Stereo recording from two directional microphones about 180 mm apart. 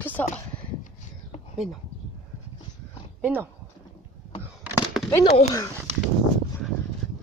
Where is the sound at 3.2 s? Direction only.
10° right (ahead or behind).